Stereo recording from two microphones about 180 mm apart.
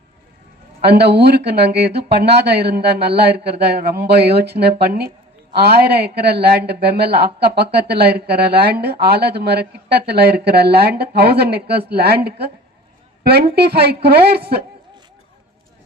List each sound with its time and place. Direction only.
0.8 s speech: 65° right (ahead or behind)